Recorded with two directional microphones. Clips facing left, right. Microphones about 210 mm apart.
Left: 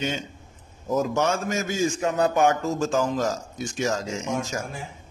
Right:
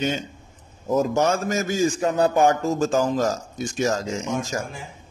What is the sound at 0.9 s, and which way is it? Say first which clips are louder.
A man's voice: right 3 dB; 40° right (ahead or behind).